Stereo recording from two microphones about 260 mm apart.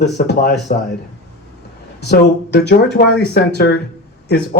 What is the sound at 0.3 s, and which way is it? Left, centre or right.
Speech, left.